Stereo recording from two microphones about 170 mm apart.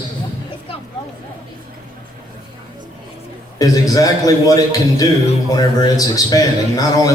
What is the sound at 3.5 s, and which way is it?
Speech, 20° left (ahead or behind).